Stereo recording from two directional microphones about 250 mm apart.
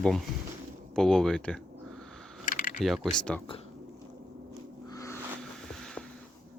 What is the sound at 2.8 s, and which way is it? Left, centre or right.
Speech, centre.